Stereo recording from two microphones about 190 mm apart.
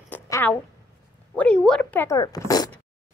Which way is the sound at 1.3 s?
5° left (ahead or behind).